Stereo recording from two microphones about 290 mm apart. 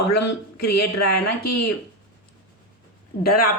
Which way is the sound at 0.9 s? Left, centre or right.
Left.